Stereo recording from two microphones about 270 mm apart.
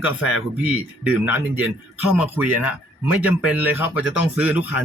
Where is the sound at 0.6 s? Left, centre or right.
Centre.